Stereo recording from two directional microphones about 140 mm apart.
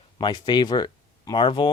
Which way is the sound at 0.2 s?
35° left (ahead or behind).